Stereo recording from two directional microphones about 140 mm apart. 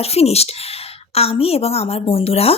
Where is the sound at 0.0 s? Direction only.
45° left (ahead or behind).